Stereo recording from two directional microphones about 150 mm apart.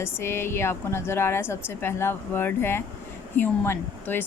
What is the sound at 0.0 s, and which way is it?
A woman's voice, 15° left (ahead or behind).